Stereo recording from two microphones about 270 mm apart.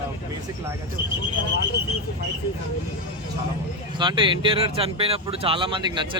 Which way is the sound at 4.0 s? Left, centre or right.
Centre.